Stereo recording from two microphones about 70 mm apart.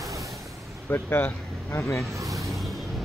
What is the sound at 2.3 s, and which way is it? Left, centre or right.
Music, centre.